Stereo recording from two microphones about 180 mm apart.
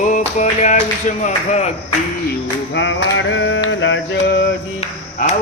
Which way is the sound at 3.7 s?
90° left.